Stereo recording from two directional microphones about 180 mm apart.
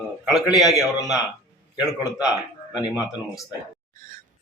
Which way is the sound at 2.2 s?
5° right (ahead or behind).